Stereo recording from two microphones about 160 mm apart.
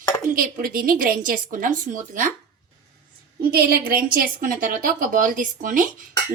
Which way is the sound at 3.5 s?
70° right (ahead or behind).